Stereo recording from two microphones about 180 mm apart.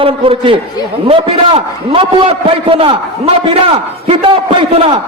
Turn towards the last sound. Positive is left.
turn(degrees=-30)  # may be behind; listen again after turning